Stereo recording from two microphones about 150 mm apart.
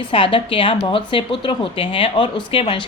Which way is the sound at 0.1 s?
35° left (ahead or behind).